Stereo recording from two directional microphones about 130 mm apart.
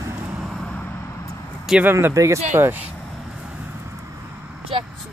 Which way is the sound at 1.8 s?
20° right (ahead or behind).